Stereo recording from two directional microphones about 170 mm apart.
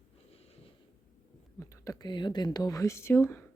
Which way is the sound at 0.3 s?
35° left (ahead or behind).